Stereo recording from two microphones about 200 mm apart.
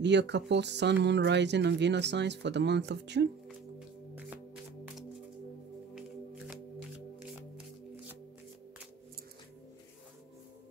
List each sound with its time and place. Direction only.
0.0 s speech: 60° right (ahead or behind)
5.9 s shuffling cards: 5° right (ahead or behind)